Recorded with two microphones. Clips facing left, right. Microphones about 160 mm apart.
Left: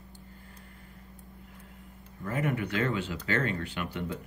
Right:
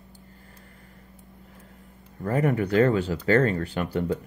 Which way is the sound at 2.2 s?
40° right (ahead or behind).